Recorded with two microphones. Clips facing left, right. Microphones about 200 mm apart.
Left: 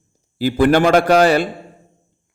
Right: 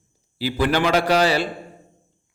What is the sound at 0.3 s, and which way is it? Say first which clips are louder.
A man's voice: left 7 dB; 50° left (ahead or behind).